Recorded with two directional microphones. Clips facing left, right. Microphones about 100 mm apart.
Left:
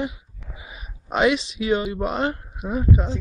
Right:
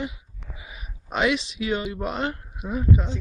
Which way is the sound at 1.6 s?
15° left (ahead or behind).